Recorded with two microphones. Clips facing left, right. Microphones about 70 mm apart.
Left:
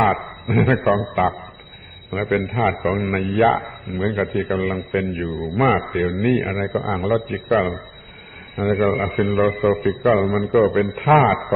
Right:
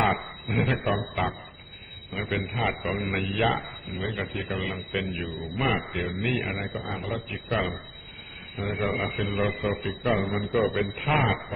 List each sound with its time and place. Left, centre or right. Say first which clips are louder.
0.2 s a man's voice: left 8 dB; left
7.5 s a man's voice: left 9 dB; left